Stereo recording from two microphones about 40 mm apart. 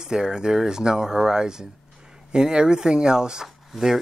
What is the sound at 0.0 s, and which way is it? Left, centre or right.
Speech, centre.